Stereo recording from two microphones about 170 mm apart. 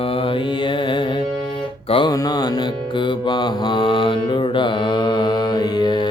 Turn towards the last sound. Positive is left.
turn(degrees=25)  # may be behind; listen again after turning